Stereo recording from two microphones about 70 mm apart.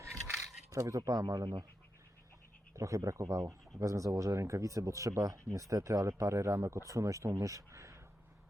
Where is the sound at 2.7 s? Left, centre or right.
Right.